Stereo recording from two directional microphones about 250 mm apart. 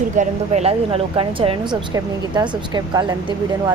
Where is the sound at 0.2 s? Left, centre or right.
Right.